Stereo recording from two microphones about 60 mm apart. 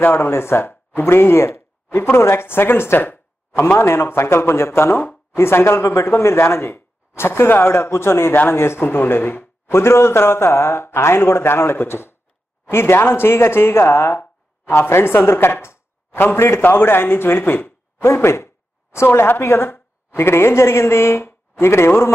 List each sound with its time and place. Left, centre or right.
0.0 s a man's voice: left